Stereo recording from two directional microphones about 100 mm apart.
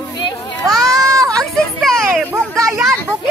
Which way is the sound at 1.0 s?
35° right (ahead or behind).